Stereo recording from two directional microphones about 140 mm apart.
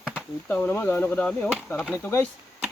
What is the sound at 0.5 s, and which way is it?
Speech, 10° left (ahead or behind).